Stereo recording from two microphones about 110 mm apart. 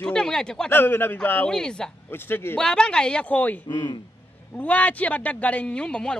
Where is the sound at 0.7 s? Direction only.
20° left (ahead or behind).